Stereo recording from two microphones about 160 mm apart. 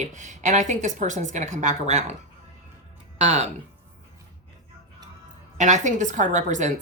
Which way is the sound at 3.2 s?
45° right (ahead or behind).